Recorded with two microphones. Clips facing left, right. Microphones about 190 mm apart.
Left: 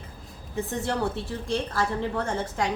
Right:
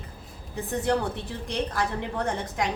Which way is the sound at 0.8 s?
15° right (ahead or behind).